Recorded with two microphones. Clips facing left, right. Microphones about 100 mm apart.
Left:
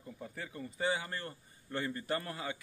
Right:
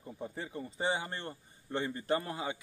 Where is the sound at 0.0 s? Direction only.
25° right (ahead or behind).